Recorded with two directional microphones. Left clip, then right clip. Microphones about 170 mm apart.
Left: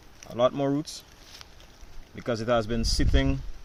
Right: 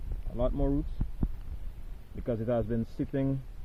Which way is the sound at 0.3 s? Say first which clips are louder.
Left 8 dB; 30° left (ahead or behind).